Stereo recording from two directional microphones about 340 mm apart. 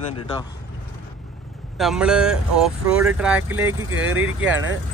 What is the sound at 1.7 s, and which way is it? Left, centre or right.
Speech, centre.